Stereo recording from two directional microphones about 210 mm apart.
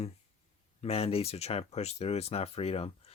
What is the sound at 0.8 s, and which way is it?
Speech, 30° left (ahead or behind).